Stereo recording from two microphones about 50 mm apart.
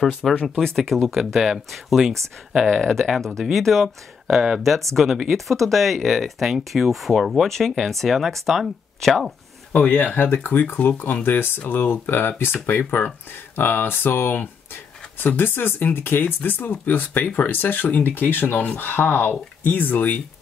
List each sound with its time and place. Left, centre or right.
0.0 s speech: centre
2.6 s speech: centre
3.1 s speech: centre
9.8 s speech: left